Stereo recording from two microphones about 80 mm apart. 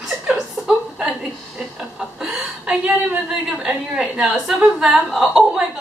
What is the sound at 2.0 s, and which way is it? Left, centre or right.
Chuckle, centre.